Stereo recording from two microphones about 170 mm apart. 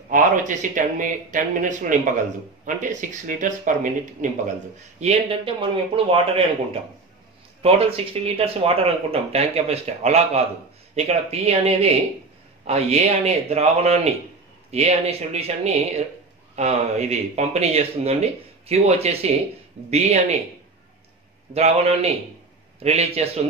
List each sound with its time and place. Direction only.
0.1 s speech: 50° right (ahead or behind)
5.0 s speech: 35° right (ahead or behind)
21.5 s speech: 35° right (ahead or behind)